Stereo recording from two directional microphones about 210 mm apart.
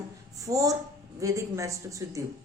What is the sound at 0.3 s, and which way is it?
A woman's voice, 15° right (ahead or behind).